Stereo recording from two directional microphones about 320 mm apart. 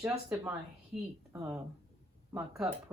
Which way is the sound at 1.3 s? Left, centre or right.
Centre.